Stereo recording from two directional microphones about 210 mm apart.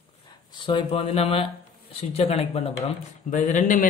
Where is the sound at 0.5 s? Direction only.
25° left (ahead or behind).